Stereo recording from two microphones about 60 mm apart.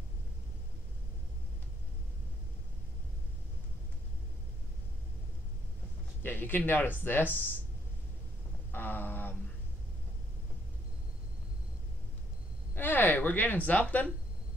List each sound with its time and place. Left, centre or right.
6.2 s speech: left
8.7 s a sound: left
12.7 s speech: left